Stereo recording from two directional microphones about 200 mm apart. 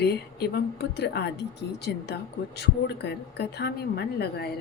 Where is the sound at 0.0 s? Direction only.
55° left (ahead or behind).